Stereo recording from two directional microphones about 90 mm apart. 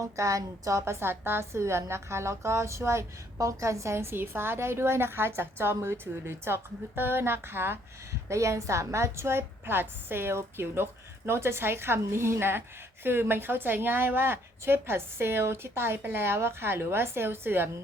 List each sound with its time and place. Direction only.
0.0 s a woman's voice: 35° right (ahead or behind)